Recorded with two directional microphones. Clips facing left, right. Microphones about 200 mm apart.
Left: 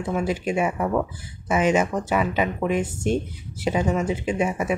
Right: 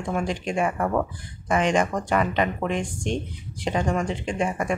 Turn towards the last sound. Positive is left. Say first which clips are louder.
# left 2 dB
turn(degrees=5)  # may be behind; listen again after turning